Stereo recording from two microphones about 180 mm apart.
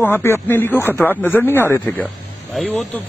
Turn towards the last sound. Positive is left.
turn(degrees=5)  # may be behind; listen again after turning